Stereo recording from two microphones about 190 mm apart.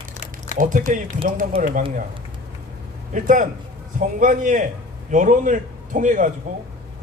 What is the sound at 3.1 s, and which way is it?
A man's voice, 40° right (ahead or behind).